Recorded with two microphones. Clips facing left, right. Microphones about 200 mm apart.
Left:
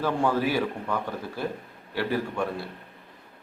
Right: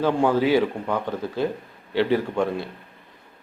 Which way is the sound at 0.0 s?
20° right (ahead or behind).